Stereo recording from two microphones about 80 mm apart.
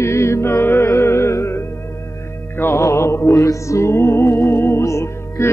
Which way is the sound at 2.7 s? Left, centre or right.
Left.